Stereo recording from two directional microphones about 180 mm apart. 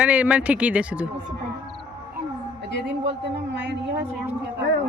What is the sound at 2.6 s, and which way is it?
A woman's voice, 75° right (ahead or behind).